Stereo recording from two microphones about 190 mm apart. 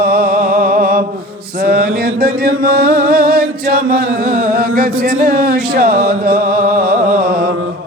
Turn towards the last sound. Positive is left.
turn(degrees=-50)  # may be behind; listen again after turning